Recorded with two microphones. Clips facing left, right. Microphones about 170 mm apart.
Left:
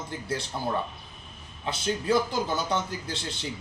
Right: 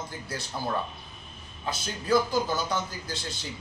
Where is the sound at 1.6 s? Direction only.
25° left (ahead or behind).